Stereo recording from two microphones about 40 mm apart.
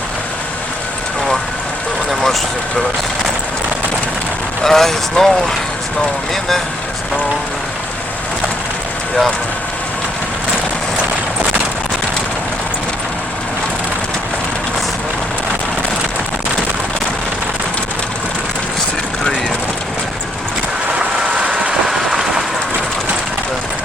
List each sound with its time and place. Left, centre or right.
2.0 s vehicle: centre
4.6 s speech: centre
21.0 s vehicle: right
21.8 s train: centre